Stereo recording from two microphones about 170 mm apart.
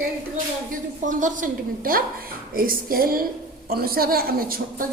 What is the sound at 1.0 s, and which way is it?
A woman's voice, 50° right (ahead or behind).